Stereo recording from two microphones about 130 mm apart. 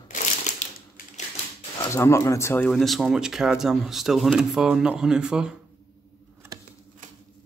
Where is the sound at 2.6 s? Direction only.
Centre (ahead or behind).